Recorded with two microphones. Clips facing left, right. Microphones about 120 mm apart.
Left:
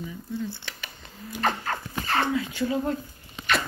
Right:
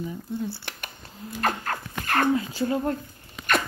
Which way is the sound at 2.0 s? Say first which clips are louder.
Right 3 dB; 50° right (ahead or behind).